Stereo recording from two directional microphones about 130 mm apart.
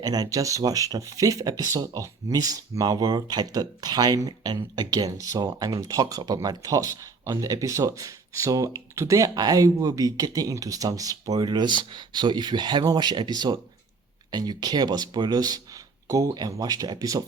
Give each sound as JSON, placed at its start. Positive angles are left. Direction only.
{"t": 0.0, "sound": "speech", "side_deg": -30}